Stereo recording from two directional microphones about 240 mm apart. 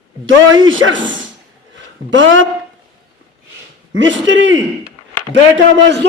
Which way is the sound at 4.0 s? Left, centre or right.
Right.